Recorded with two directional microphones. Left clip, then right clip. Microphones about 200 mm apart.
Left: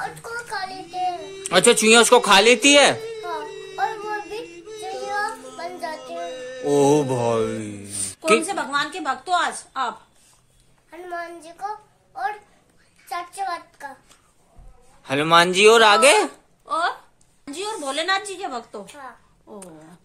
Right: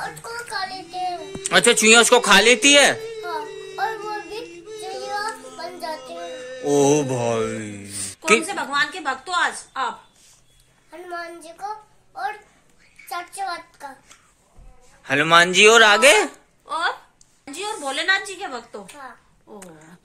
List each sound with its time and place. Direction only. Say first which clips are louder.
0.7 s music: left 1 dB; centre (ahead or behind)
7.9 s music: left 2 dB; 55° left (ahead or behind)
8.5 s a woman's voice: right 1 dB; 55° left (ahead or behind)
10.9 s a child's voice: left 1 dB; centre (ahead or behind)
13.1 s child singing: left 1 dB; centre (ahead or behind)
15.0 s speech: right 1 dB; 5° left (ahead or behind)
16.6 s a woman's voice: left 1 dB; 55° left (ahead or behind)